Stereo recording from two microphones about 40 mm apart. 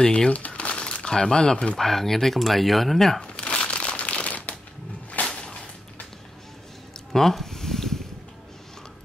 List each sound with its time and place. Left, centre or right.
0.0 s speech: centre
0.3 s crumpling: left; by 1.7 s centre
1.8 s speech: centre
3.2 s crumpling: left
5.2 s whip: left
7.1 s a sound: centre